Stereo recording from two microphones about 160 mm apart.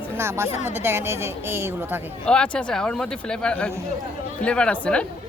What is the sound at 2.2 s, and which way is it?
Speech, 5° left (ahead or behind).